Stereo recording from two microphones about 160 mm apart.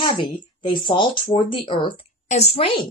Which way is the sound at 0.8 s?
30° left (ahead or behind).